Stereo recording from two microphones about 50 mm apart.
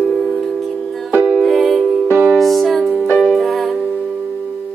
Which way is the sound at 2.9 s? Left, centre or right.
Centre.